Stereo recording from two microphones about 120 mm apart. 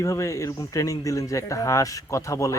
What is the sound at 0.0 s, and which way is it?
Speech, 25° left (ahead or behind).